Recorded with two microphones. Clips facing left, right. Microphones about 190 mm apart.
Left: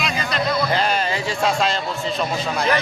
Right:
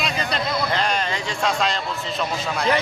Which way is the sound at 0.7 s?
5° left (ahead or behind).